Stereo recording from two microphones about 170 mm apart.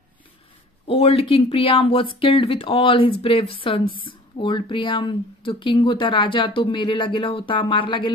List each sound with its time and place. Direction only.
0.8 s speech: 35° left (ahead or behind)